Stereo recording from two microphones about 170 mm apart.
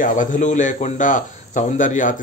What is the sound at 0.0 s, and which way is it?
A man's voice, 50° left (ahead or behind).